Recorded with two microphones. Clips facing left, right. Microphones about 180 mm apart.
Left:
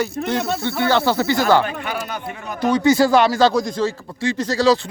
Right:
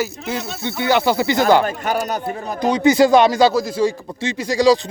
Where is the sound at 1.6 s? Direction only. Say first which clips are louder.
Right 5 dB; 40° right (ahead or behind).